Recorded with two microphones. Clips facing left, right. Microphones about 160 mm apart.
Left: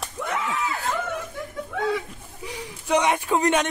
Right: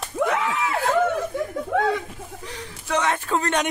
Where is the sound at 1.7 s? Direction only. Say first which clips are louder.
Right 6 dB; 65° right (ahead or behind).